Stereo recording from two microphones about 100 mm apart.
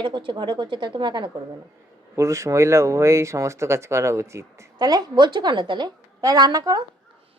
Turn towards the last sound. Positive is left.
turn(degrees=-40)  # may be behind; listen again after turning